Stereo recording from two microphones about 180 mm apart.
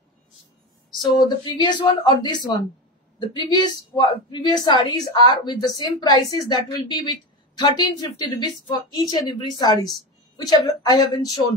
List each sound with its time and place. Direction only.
0.8 s a woman's voice: 25° left (ahead or behind)